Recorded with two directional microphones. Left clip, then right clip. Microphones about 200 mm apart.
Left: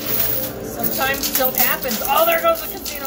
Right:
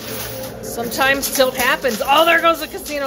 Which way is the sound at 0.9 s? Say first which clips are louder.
Right 5 dB; 45° right (ahead or behind).